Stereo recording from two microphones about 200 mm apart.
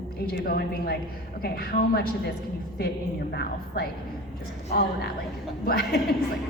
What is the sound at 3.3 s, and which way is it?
Speech, 50° left (ahead or behind).